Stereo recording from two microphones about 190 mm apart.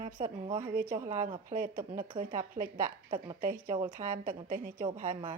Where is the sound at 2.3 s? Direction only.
40° right (ahead or behind).